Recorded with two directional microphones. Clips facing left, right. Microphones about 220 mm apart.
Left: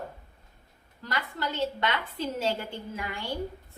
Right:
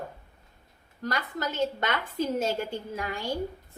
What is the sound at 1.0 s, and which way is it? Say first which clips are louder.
A woman's voice: right 2 dB; 45° right (ahead or behind).